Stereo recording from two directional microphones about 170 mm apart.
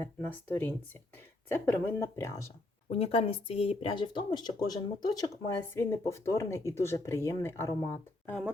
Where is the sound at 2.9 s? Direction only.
35° left (ahead or behind); by 8.3 s 20° left (ahead or behind).